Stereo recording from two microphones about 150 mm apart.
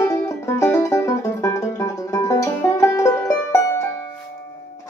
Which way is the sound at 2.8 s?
20° left (ahead or behind).